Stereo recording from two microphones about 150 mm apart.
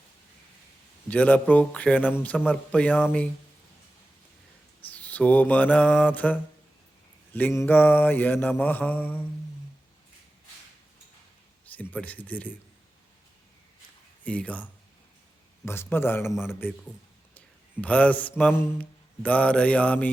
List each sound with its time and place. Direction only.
1.0 s mantra: 10° left (ahead or behind)
4.9 s mantra: 10° left (ahead or behind)
11.6 s speech: 10° left (ahead or behind)
14.3 s mantra: 10° left (ahead or behind)